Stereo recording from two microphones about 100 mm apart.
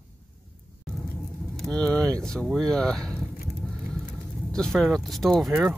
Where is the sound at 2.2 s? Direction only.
5° left (ahead or behind).